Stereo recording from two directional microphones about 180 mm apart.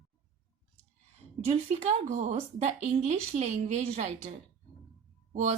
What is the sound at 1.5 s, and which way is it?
Speech, 40° right (ahead or behind).